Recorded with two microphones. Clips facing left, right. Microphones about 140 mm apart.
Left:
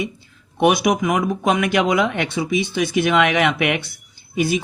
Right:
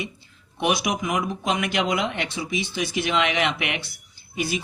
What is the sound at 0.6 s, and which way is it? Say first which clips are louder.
Speech: left 7 dB; 50° left (ahead or behind).